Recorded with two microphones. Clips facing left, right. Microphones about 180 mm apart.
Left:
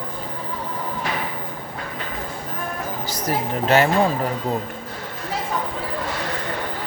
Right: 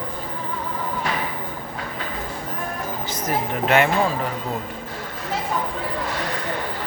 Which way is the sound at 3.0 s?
35° left (ahead or behind).